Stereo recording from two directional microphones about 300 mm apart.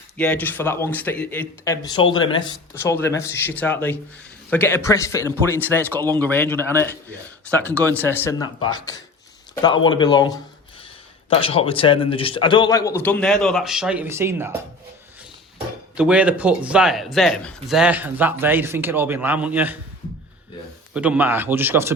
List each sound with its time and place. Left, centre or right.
0.2 s a man's voice: centre
16.0 s speech: centre
20.9 s speech: centre